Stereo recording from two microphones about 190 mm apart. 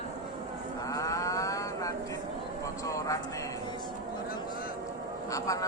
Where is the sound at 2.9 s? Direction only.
15° left (ahead or behind).